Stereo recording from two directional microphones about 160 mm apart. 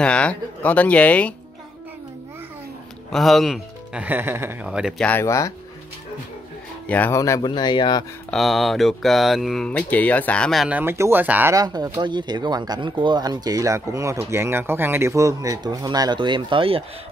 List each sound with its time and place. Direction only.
0.0 s speech: 5° left (ahead or behind)
3.1 s speech: centre (ahead or behind)
5.0 s speech: 15° left (ahead or behind)
6.9 s speech: 15° left (ahead or behind)
8.3 s speech: centre (ahead or behind)
10.8 s speech: 15° right (ahead or behind)
11.5 s speech: 25° right (ahead or behind)